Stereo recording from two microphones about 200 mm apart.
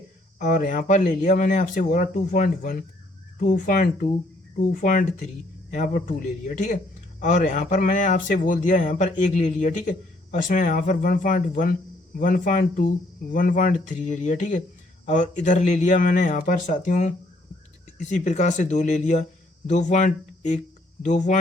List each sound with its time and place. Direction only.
0.3 s speech: 40° left (ahead or behind)
18.1 s speech: 35° left (ahead or behind)